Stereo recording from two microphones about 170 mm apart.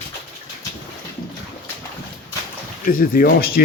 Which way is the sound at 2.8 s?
55° left (ahead or behind).